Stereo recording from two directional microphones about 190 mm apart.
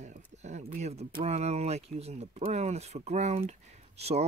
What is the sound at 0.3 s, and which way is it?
Speech, 40° right (ahead or behind).